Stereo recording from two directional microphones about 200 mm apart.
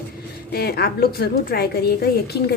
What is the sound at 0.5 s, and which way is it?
A woman's voice, 50° left (ahead or behind).